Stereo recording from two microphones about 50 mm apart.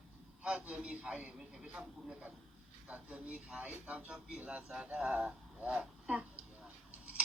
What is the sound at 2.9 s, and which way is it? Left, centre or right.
A man's voice, right.